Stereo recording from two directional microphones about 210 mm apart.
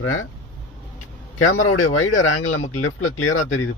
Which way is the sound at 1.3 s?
80° left.